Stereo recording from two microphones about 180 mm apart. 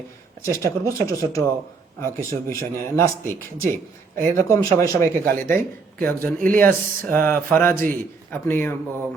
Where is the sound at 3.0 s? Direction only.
15° left (ahead or behind).